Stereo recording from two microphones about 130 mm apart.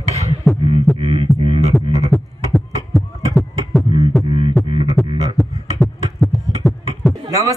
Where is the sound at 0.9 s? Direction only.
40° right (ahead or behind).